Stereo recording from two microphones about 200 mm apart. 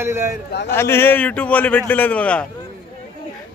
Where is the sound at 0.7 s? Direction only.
10° left (ahead or behind).